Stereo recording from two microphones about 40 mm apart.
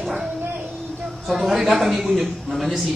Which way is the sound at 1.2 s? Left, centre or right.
Centre.